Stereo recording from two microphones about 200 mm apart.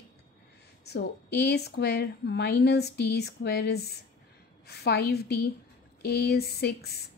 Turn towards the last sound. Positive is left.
turn(degrees=55)  # may be behind; listen again after turning